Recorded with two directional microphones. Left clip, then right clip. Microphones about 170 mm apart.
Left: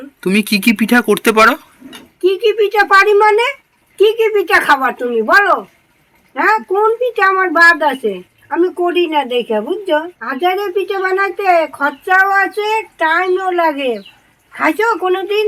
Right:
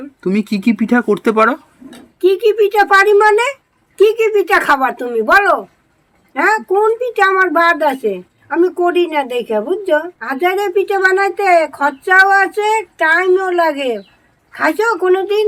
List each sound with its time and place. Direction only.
0.2 s a woman's voice: 10° right (ahead or behind)